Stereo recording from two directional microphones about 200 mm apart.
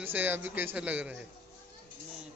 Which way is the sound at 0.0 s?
10° right (ahead or behind).